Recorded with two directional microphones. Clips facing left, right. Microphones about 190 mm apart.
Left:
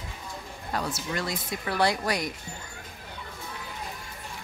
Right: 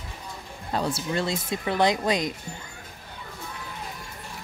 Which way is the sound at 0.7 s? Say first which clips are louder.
Right 4 dB; 30° right (ahead or behind).